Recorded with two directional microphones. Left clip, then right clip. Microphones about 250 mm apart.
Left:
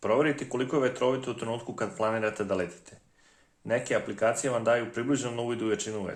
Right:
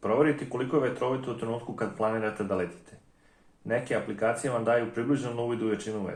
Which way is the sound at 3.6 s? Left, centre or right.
Left.